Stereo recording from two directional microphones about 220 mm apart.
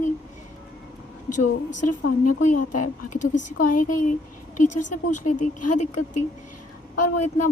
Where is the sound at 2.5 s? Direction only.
90° left.